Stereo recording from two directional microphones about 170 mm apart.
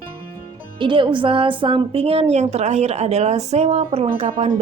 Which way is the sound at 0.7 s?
30° right (ahead or behind).